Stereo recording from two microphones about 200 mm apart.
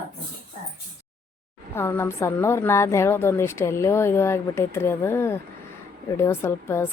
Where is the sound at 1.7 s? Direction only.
10° left (ahead or behind).